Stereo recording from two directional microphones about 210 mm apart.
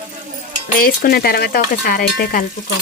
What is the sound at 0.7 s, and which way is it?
Speech, 45° left (ahead or behind).